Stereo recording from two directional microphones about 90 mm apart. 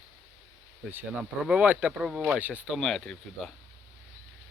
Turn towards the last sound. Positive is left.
turn(degrees=0)  # may be behind; listen again after turning